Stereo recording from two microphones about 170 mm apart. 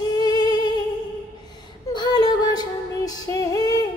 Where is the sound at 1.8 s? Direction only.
25° left (ahead or behind).